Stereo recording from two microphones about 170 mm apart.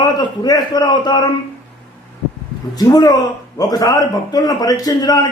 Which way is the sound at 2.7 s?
25° left (ahead or behind).